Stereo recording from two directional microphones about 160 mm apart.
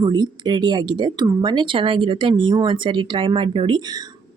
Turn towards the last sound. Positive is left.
turn(degrees=-35)  # may be behind; listen again after turning